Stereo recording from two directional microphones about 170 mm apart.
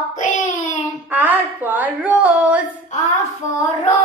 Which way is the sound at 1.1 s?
10° right (ahead or behind).